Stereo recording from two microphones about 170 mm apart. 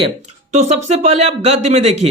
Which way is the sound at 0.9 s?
40° right (ahead or behind).